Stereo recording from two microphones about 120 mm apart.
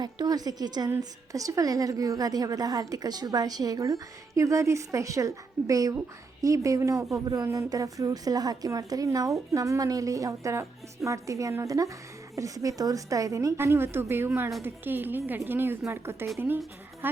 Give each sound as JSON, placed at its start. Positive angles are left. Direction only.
{"t": 0.0, "sound": "a woman's voice", "side_deg": -35}